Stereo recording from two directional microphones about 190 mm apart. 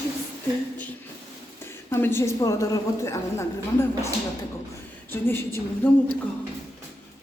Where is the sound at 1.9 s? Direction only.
10° left (ahead or behind).